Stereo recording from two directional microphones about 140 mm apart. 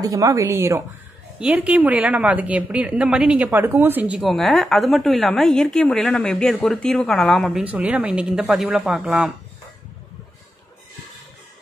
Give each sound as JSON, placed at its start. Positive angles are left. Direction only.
{"t": 0.0, "sound": "speech", "side_deg": -25}
{"t": 1.4, "sound": "a woman's voice", "side_deg": -10}
{"t": 4.2, "sound": "a woman's voice", "side_deg": 0}
{"t": 7.7, "sound": "a woman's voice", "side_deg": -10}